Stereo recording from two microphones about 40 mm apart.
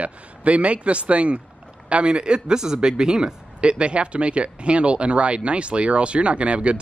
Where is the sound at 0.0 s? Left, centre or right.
Right.